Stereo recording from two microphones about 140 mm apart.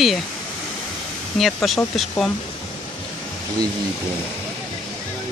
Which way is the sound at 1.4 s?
Centre (ahead or behind).